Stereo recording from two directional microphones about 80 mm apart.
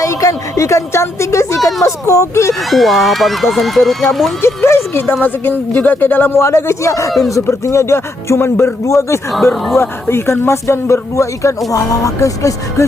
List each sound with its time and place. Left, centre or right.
0.0 s speech: left
2.5 s speech: centre
4.4 s speech: left